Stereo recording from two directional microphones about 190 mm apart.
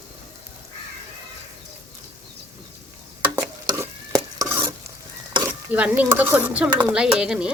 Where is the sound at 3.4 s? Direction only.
15° right (ahead or behind).